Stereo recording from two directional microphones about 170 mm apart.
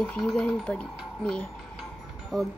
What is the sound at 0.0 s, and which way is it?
Speech, 5° left (ahead or behind).